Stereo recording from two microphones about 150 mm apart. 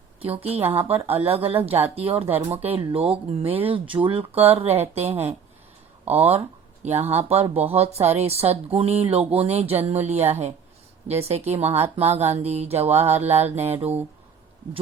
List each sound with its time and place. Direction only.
0.2 s speech: 40° right (ahead or behind)